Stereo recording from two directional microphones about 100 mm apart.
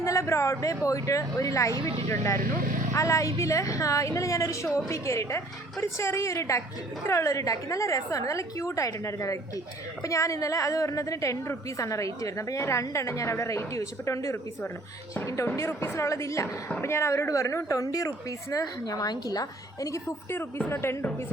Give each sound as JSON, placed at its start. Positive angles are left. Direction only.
{"t": 0.0, "sound": "a woman's voice", "side_deg": 30}